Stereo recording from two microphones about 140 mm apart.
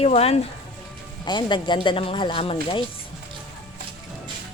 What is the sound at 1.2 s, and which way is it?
Speech, 35° left (ahead or behind).